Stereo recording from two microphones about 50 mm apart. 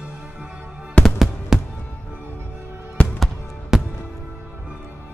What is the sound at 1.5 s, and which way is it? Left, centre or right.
Music, centre.